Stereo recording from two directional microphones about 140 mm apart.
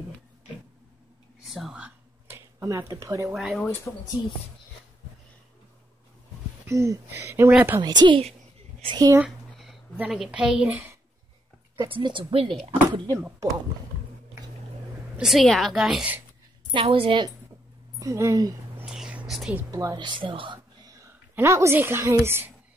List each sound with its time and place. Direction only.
1.5 s a sound: 5° right (ahead or behind); by 3.3 s 25° right (ahead or behind)
3.3 s a woman's voice: centre (ahead or behind)
3.9 s speech: 10° left (ahead or behind)
6.6 s speech: 20° right (ahead or behind)
7.8 s a woman's voice: 30° right (ahead or behind)
9.5 s a sound: centre (ahead or behind)
9.9 s a woman's voice: 5° right (ahead or behind)
11.9 s a woman's voice: 35° right (ahead or behind)
12.9 s speech: 25° right (ahead or behind)
15.1 s a woman's voice: centre (ahead or behind)
16.7 s a woman's voice: 40° right (ahead or behind)
17.9 s speech: 25° right (ahead or behind)
18.9 s whispering: 5° right (ahead or behind)
19.7 s a woman's voice: 25° right (ahead or behind)